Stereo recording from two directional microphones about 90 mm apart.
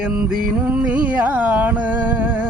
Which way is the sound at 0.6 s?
15° right (ahead or behind).